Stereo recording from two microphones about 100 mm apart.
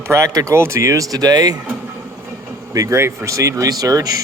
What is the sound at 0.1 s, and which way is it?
Speech, 30° right (ahead or behind).